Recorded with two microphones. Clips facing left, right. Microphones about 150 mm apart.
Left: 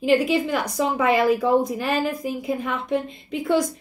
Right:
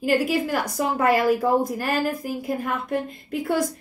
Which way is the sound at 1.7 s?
Centre (ahead or behind).